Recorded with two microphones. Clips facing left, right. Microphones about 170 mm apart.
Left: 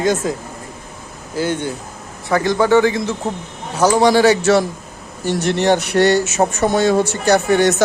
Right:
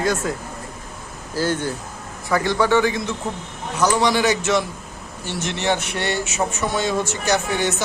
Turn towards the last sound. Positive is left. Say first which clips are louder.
# left 7 dB
turn(degrees=65)  # may be behind; listen again after turning